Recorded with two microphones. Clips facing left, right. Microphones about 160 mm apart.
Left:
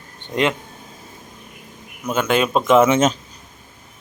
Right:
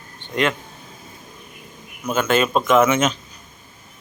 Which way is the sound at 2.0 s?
15° left (ahead or behind).